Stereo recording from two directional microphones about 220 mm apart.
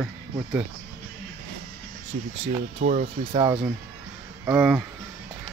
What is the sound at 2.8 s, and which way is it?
Speech, 35° right (ahead or behind).